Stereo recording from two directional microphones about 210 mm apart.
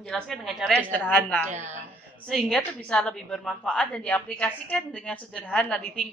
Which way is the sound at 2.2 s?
5° left (ahead or behind).